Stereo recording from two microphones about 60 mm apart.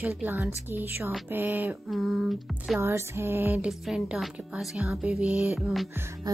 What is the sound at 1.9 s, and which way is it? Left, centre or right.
Speech, centre.